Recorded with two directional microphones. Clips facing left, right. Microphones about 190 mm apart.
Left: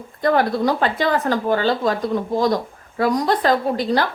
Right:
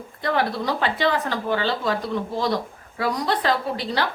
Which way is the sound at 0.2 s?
45° left (ahead or behind).